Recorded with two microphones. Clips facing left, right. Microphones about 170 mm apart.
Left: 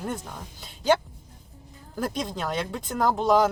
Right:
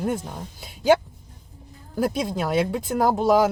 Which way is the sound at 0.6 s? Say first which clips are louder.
Right 4 dB; 10° right (ahead or behind).